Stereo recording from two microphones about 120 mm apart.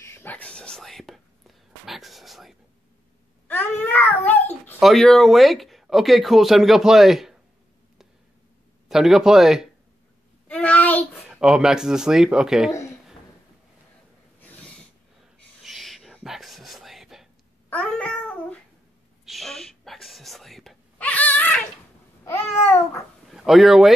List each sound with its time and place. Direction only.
0.0 s speech: 20° left (ahead or behind); by 2.5 s centre (ahead or behind)
3.4 s a child's voice: 15° left (ahead or behind)
4.7 s speech: centre (ahead or behind)
8.8 s speech: 5° right (ahead or behind)
10.5 s child singing: 10° left (ahead or behind)
11.2 s speech: 5° right (ahead or behind)
14.4 s snort: 15° left (ahead or behind)
15.6 s whispering: centre (ahead or behind)
17.6 s babbling: 10° left (ahead or behind)
19.2 s whispering: centre (ahead or behind)
23.3 s speech: centre (ahead or behind)